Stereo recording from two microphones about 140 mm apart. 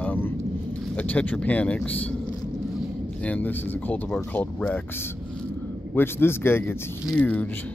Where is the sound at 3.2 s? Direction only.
10° left (ahead or behind).